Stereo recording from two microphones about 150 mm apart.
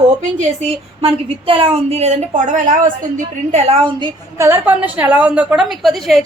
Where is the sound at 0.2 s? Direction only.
50° right (ahead or behind).